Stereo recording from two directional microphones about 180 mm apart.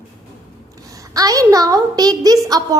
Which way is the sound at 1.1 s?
20° right (ahead or behind).